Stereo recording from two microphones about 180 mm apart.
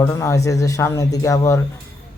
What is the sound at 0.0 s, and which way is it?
Speech, 15° left (ahead or behind).